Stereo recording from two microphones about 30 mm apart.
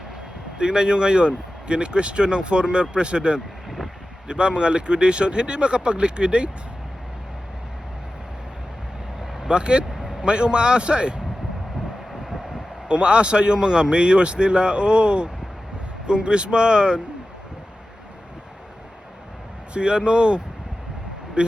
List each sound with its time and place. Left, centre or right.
0.6 s a man's voice: right
9.5 s vehicle: right
10.2 s a man's voice: right
12.9 s a man's voice: right
19.7 s a man's voice: right